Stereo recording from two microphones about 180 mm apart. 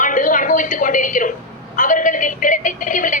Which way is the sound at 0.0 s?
45° left (ahead or behind).